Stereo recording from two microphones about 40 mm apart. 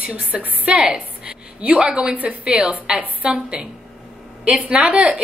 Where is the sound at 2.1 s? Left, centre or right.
Right.